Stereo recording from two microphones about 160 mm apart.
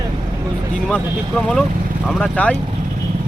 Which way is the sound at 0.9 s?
5° left (ahead or behind).